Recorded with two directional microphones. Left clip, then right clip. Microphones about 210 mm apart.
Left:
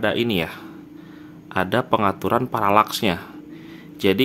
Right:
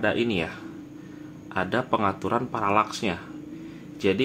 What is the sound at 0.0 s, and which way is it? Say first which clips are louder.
Speech: left 3 dB; 30° left (ahead or behind).